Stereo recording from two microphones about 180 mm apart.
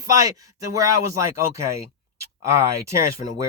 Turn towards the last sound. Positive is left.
turn(degrees=-15)  # may be behind; listen again after turning